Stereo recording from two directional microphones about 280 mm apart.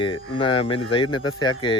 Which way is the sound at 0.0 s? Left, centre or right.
Centre.